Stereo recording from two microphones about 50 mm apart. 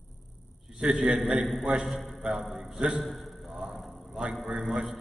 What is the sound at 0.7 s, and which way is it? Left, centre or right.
A man's voice, centre.